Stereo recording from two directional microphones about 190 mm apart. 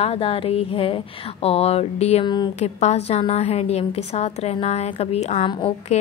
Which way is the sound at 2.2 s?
25° left (ahead or behind).